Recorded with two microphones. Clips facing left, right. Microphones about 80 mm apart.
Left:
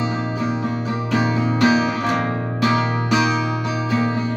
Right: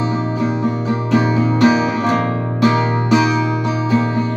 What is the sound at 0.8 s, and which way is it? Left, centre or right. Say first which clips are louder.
Music: right 5 dB; right.